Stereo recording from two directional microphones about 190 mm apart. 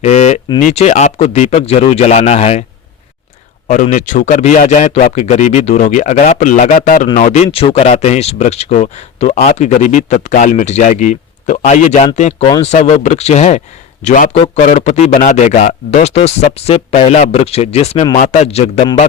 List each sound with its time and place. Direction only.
0.0 s a sound: 35° left (ahead or behind)
0.7 s speech: 35° left (ahead or behind)
3.7 s a man's voice: 40° left (ahead or behind)